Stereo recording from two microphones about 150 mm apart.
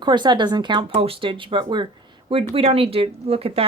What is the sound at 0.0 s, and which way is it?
Speech, 30° right (ahead or behind).